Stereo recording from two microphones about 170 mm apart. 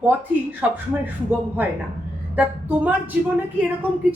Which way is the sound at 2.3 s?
10° right (ahead or behind).